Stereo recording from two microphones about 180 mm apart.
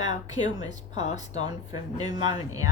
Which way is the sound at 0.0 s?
20° right (ahead or behind).